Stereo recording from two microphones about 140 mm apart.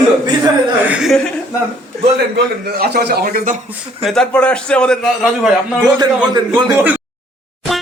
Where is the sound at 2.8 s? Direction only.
90° right.